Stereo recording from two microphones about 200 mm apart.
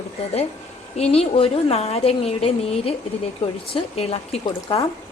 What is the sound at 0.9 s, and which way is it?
A woman's voice, 30° left (ahead or behind).